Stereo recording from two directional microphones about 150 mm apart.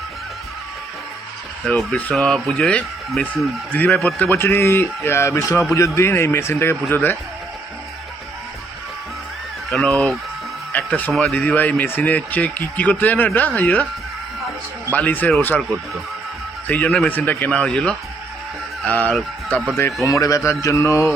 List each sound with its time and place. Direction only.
1.6 s speech: 5° left (ahead or behind)
4.3 s speech: 15° left (ahead or behind)
9.7 s speech: 5° left (ahead or behind)
14.9 s speech: 10° left (ahead or behind)
16.6 s speech: 10° left (ahead or behind)
19.7 s speech: 20° left (ahead or behind)